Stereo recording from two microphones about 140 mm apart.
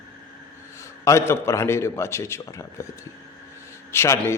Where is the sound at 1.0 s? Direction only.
20° left (ahead or behind).